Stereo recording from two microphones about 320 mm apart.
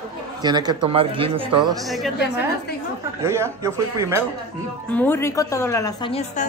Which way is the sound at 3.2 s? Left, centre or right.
Centre.